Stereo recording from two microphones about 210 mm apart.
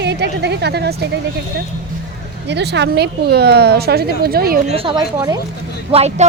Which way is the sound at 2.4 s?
55° right (ahead or behind).